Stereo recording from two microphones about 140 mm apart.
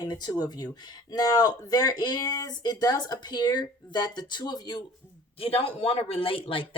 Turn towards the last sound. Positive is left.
turn(degrees=40)  # may be behind; listen again after turning